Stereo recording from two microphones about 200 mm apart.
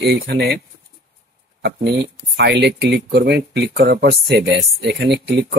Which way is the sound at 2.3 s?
55° right (ahead or behind).